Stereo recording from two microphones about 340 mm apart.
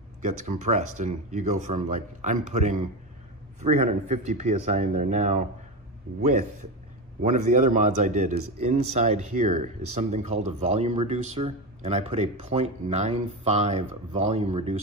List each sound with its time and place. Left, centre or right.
0.2 s speech: right
7.2 s speech: right